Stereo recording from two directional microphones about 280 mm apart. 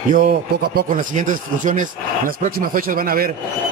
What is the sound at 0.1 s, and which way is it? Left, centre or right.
Speech, right.